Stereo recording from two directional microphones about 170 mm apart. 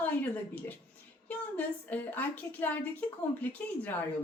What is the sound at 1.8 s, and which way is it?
A woman's voice, 10° left (ahead or behind).